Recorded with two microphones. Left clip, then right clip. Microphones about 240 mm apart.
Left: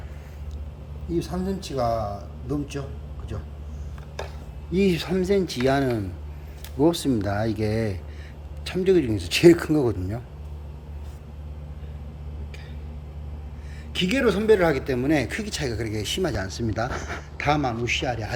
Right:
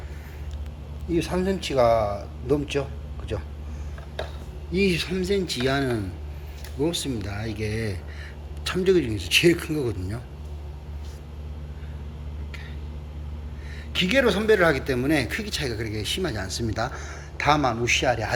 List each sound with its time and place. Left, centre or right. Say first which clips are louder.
1.4 s a man's voice: right 6 dB; centre
4.7 s speech: left 1 dB; centre
6.7 s speech: left 5 dB; left
8.6 s speech: even; centre
13.9 s speech: right 2 dB; centre